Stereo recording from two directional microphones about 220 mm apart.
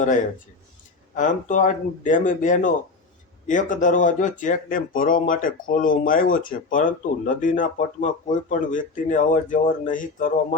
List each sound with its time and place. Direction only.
1.1 s speech: 35° left (ahead or behind)